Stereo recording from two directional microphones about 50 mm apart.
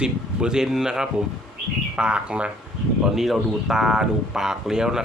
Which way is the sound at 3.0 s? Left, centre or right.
Centre.